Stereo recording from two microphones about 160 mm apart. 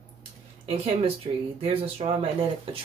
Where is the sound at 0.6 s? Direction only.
40° right (ahead or behind).